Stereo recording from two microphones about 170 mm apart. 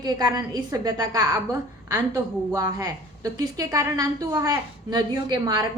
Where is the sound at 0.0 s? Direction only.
25° right (ahead or behind).